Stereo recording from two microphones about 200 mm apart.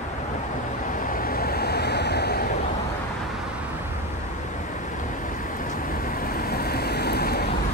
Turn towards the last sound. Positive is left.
turn(degrees=50)  # may be behind; listen again after turning